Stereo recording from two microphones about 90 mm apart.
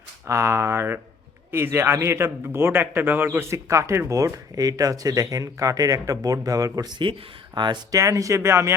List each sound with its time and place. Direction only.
0.3 s a man's voice: 35° right (ahead or behind)
7.0 s speech: 60° right (ahead or behind)
7.9 s a man's voice: 40° right (ahead or behind)